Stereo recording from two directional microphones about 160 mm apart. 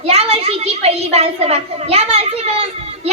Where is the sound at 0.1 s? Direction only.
40° right (ahead or behind).